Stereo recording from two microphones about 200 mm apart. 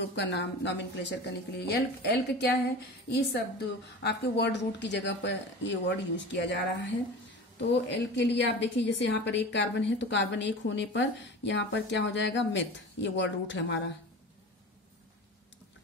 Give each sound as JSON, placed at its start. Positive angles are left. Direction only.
{"t": 0.0, "sound": "a woman's voice", "side_deg": 60}